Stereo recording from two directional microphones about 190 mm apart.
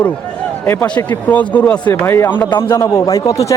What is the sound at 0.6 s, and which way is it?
A man's voice, 10° left (ahead or behind).